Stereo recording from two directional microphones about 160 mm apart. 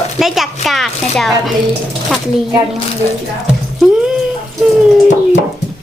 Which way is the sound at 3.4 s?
5° right (ahead or behind).